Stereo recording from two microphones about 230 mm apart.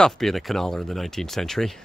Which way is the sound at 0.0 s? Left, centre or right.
Centre.